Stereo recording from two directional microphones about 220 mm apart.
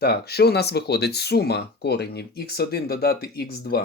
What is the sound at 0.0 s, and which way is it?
Speech, 45° left (ahead or behind).